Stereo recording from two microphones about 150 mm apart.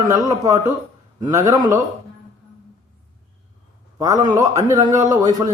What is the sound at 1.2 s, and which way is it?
Speech, 25° right (ahead or behind).